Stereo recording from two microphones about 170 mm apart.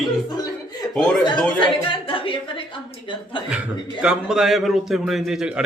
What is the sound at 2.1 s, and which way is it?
Speech, 30° left (ahead or behind).